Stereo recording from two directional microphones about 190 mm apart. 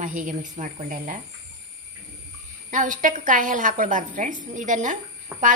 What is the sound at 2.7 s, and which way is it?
A woman's voice, 45° right (ahead or behind).